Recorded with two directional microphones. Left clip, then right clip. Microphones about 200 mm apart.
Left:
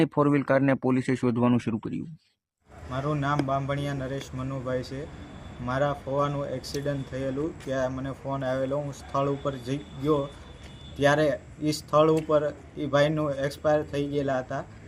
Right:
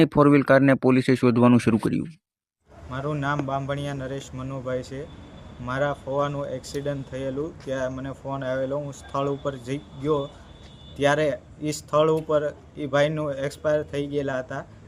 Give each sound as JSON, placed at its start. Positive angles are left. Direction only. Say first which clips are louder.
{"t": 0.0, "sound": "speech", "louder": "right 6 dB", "side_deg": -25}
{"t": 2.9, "sound": "speech", "louder": "right 1 dB", "side_deg": -5}